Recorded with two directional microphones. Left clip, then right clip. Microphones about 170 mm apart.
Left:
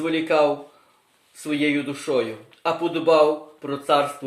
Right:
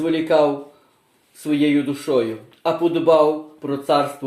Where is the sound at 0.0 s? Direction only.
25° left (ahead or behind).